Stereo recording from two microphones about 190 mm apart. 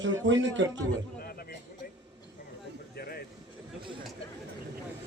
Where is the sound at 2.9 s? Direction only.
55° left (ahead or behind).